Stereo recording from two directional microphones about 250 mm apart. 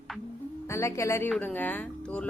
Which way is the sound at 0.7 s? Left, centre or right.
Centre.